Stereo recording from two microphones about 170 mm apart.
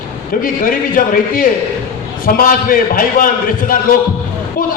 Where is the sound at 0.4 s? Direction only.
55° left (ahead or behind).